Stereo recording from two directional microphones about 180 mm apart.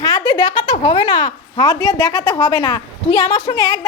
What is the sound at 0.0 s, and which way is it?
A woman's voice, 25° left (ahead or behind).